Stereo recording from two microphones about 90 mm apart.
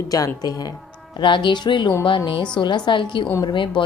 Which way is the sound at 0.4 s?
45° left (ahead or behind).